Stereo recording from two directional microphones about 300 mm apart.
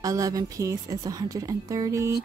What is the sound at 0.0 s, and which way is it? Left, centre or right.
A woman's voice, centre.